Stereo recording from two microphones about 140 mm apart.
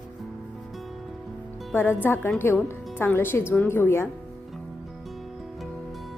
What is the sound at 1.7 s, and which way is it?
A woman's voice, 15° left (ahead or behind).